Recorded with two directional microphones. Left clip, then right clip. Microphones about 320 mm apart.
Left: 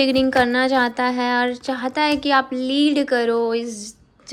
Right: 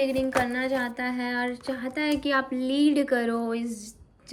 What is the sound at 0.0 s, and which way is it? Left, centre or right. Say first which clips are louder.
A woman's voice: left 8 dB; centre.